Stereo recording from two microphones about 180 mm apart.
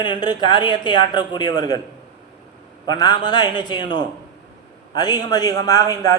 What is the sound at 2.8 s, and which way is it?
A man's voice, 20° left (ahead or behind).